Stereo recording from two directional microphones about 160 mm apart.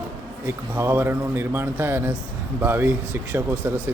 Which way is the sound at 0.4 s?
15° right (ahead or behind).